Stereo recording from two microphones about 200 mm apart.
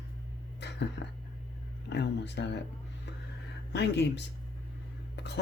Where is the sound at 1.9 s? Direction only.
60° left (ahead or behind).